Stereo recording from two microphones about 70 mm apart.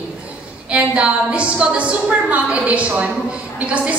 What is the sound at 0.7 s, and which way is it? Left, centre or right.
A woman's voice, centre.